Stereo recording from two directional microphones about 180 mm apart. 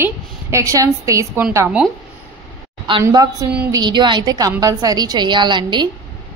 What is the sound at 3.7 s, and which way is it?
A woman's voice, 25° right (ahead or behind).